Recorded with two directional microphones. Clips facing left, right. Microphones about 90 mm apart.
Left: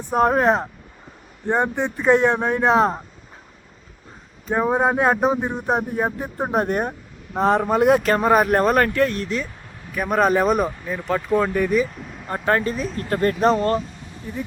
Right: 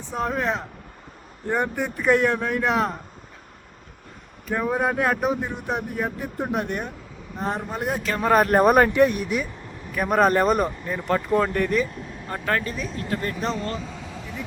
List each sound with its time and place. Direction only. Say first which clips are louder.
0.0 s speech: left 8 dB; 50° left (ahead or behind)
1.5 s speech: left 4 dB; 25° left (ahead or behind)
4.4 s speech: left 4 dB; 30° left (ahead or behind); by 6.9 s 45° left (ahead or behind)
7.3 s speech: left 10 dB; 90° left
8.3 s speech: even; 5° left (ahead or behind)
8.5 s speech: right 1 dB; 10° right (ahead or behind)
9.9 s speech: left 1 dB; centre (ahead or behind)
12.3 s speech: left 5 dB; 30° left (ahead or behind)
14.0 s a sound: left 3 dB; 90° right